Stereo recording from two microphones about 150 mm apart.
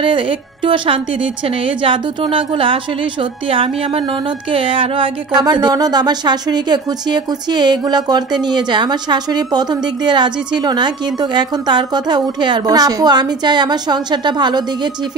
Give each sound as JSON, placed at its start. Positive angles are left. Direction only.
{"t": 0.0, "sound": "a woman's voice", "side_deg": -35}